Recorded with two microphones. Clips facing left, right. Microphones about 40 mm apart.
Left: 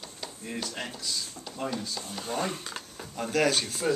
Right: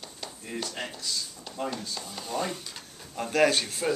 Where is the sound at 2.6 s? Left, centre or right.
Left.